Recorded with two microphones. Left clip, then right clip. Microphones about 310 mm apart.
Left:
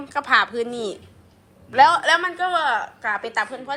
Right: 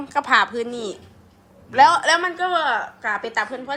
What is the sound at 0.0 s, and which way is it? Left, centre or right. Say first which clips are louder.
A woman's voice: right 1 dB; centre.